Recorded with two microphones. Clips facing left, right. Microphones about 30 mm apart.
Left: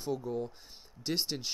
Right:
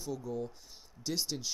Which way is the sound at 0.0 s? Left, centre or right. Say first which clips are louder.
Left 3 dB; left.